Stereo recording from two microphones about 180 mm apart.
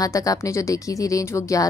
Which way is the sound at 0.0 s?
20° left (ahead or behind).